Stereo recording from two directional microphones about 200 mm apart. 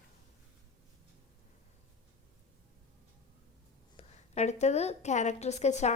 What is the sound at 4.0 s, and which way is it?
A woman's voice, 35° left (ahead or behind).